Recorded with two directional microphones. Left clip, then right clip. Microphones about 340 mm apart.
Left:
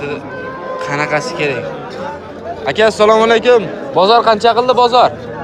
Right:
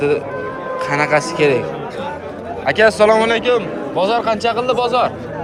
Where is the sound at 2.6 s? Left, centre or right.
Centre.